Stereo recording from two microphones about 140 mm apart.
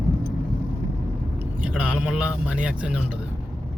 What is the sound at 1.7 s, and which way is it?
Speech, 5° right (ahead or behind).